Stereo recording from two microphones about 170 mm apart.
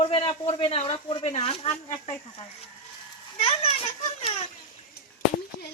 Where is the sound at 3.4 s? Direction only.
35° left (ahead or behind).